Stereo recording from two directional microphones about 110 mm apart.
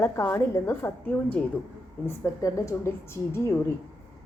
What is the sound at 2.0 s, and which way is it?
A woman's voice, 30° left (ahead or behind).